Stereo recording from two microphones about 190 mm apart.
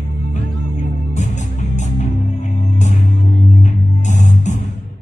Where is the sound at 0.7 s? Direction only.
40° left (ahead or behind).